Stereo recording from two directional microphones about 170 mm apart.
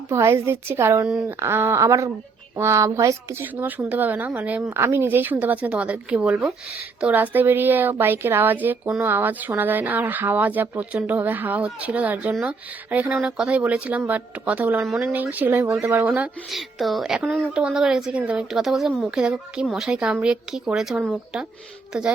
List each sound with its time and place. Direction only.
0.1 s a woman's voice: 15° right (ahead or behind)